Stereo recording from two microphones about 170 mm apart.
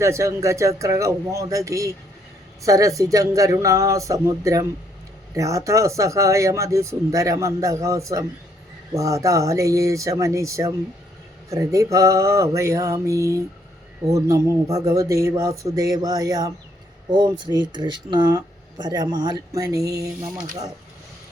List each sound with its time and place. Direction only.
0.0 s speech: 15° right (ahead or behind)